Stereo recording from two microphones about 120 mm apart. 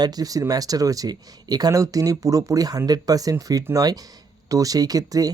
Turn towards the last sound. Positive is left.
turn(degrees=-30)  # may be behind; listen again after turning